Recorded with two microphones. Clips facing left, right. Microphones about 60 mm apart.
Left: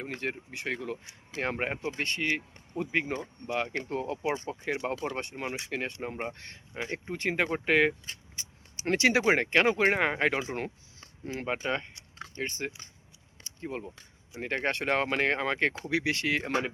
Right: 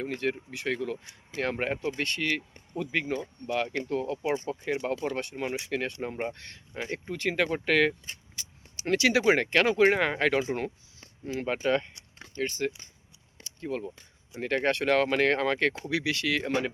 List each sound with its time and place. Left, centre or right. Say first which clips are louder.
0.0 s speech: right 4 dB; left
5.0 s speech: right 3 dB; centre
13.4 s a sound: right 3 dB; left
14.4 s speech: right 4 dB; centre
15.8 s speech: even; left
16.4 s speech: right 1 dB; centre